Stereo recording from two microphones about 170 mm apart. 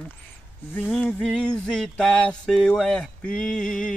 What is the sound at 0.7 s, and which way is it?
Music, 5° left (ahead or behind).